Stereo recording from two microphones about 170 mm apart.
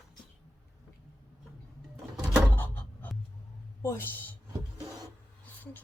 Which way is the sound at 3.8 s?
15° left (ahead or behind).